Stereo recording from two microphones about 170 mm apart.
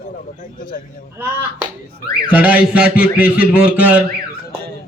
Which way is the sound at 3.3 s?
60° left (ahead or behind).